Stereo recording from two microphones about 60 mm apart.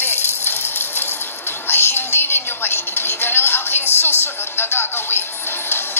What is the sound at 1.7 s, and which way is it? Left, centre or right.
Music, left.